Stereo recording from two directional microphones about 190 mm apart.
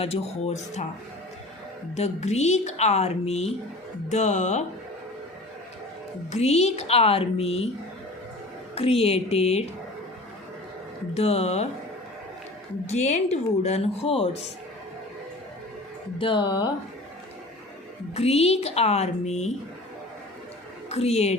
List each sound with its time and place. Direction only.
0.0 s a woman's voice: 30° left (ahead or behind)
2.0 s a woman's voice: 35° left (ahead or behind)
6.3 s a woman's voice: 35° left (ahead or behind)
8.7 s a woman's voice: 30° left (ahead or behind)
11.1 s a woman's voice: 35° left (ahead or behind)
12.9 s a woman's voice: 35° left (ahead or behind)
16.1 s speech: 25° left (ahead or behind)
18.1 s a woman's voice: 35° left (ahead or behind)
20.9 s a woman's voice: 35° left (ahead or behind)